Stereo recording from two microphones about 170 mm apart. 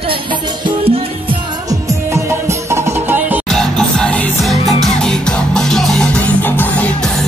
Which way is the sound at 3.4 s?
Centre (ahead or behind).